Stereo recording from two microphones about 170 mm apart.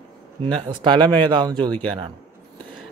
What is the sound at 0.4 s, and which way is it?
A man's voice, 30° right (ahead or behind).